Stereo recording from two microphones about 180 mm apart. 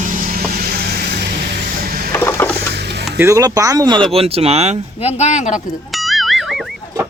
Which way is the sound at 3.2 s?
15° right (ahead or behind).